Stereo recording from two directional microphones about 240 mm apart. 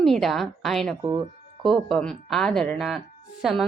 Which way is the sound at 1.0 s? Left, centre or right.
Centre.